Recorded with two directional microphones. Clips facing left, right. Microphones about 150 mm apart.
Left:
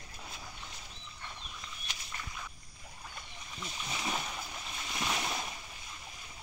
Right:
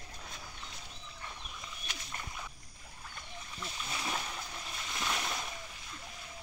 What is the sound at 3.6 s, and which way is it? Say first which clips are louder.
Wild animals: left 1 dB; 10° left (ahead or behind).